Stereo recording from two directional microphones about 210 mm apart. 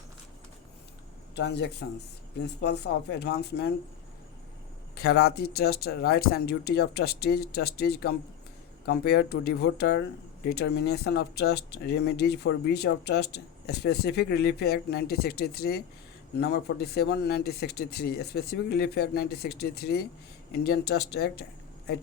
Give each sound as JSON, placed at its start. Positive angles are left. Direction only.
{"t": 1.4, "sound": "speech", "side_deg": 55}
{"t": 4.9, "sound": "speech", "side_deg": 50}